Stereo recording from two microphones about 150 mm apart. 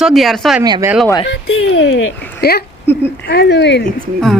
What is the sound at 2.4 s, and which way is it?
Speech, 90° left.